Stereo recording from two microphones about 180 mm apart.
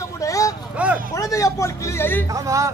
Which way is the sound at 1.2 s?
20° left (ahead or behind).